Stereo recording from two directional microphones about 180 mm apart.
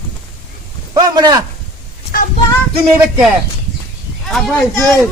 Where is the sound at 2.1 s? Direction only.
55° left (ahead or behind).